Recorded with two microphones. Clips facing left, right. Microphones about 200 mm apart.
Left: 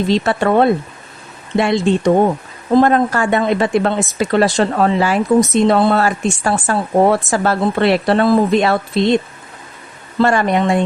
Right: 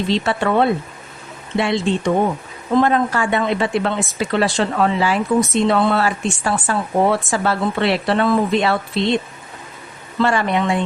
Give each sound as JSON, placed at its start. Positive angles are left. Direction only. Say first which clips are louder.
{"t": 0.1, "sound": "speech", "louder": "left 3 dB", "side_deg": 45}
{"t": 10.2, "sound": "speech", "louder": "left 4 dB", "side_deg": 45}